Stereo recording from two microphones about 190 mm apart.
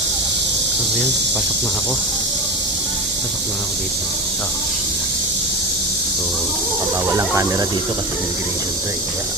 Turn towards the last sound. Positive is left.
turn(degrees=-15)  # may be behind; listen again after turning